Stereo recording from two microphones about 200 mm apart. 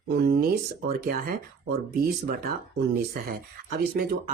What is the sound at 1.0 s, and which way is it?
Speech, 45° right (ahead or behind).